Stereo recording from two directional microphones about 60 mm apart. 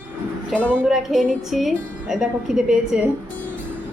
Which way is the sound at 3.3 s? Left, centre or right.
Left.